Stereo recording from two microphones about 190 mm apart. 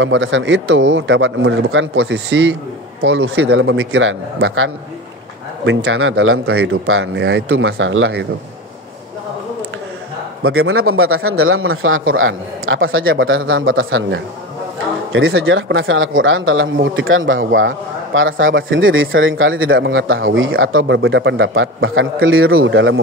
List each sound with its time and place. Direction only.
0.0 s speech: 75° right (ahead or behind)
5.7 s speech: 90° right
10.4 s speech: 90° right